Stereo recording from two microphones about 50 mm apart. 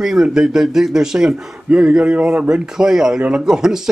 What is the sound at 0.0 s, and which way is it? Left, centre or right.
A man's voice, centre.